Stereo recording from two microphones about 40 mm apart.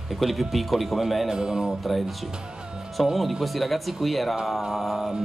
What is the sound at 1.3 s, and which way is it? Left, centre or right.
Speech, centre.